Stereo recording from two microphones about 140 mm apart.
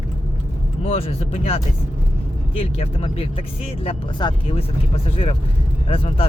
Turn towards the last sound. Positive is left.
turn(degrees=45)  # may be behind; listen again after turning